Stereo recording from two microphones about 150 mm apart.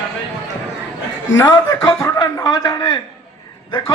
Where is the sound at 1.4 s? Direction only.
25° left (ahead or behind).